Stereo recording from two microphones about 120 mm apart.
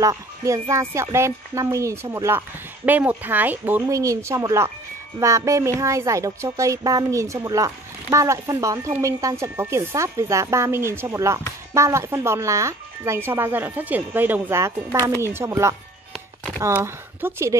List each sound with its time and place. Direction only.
0.0 s speech: 25° right (ahead or behind)
2.3 s speech: 15° right (ahead or behind)
3.8 s speech: 30° right (ahead or behind)